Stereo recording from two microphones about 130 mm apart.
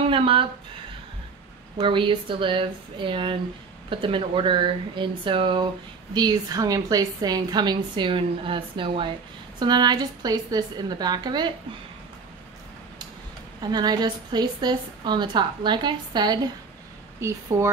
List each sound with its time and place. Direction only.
0.1 s a woman's voice: 40° right (ahead or behind)
1.8 s a woman's voice: 40° right (ahead or behind)
6.1 s a woman's voice: 30° right (ahead or behind)
13.6 s a woman's voice: 30° right (ahead or behind)
17.2 s speech: 20° right (ahead or behind)